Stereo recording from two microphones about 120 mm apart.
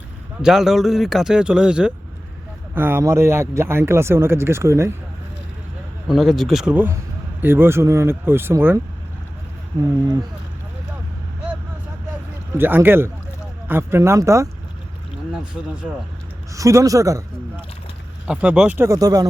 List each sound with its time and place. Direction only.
0.4 s speech: 5° right (ahead or behind)
2.7 s speech: 20° right (ahead or behind)
6.1 s speech: centre (ahead or behind); by 8.8 s 20° right (ahead or behind)
12.5 s speech: 15° right (ahead or behind)
16.6 s speech: 25° right (ahead or behind)
18.3 s speech: 10° right (ahead or behind)
18.9 s speech: 30° right (ahead or behind)